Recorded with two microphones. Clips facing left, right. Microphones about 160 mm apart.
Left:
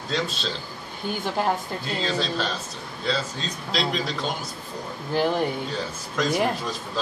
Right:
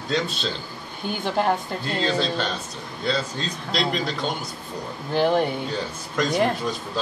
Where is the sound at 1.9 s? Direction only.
Centre (ahead or behind).